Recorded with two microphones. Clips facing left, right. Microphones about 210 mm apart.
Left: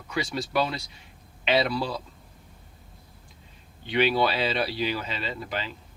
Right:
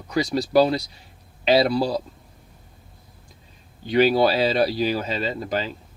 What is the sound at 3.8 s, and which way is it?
Speech, 40° right (ahead or behind).